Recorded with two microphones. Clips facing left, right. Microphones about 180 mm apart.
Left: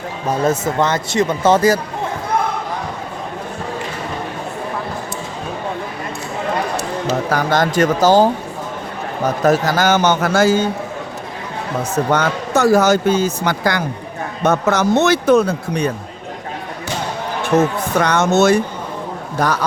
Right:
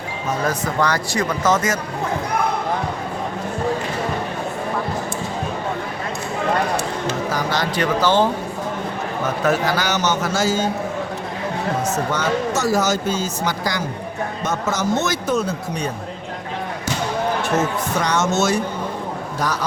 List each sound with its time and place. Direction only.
0.3 s speech: 25° left (ahead or behind)
7.3 s a man's voice: 55° left (ahead or behind)
12.1 s speech: 60° left (ahead or behind)
18.0 s speech: 60° left (ahead or behind)